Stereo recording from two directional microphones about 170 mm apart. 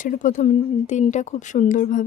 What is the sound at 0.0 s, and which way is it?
Speech, 50° left (ahead or behind).